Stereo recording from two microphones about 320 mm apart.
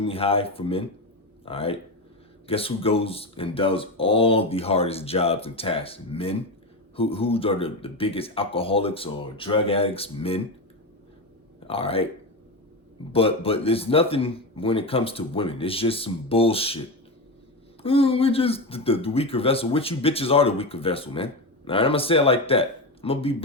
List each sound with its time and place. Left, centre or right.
0.0 s speech: centre
11.7 s speech: centre
13.1 s speech: centre
17.8 s speech: centre